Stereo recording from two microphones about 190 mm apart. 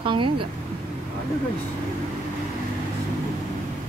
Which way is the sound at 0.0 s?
25° right (ahead or behind).